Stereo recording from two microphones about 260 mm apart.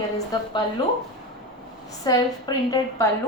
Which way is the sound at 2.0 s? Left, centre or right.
Centre.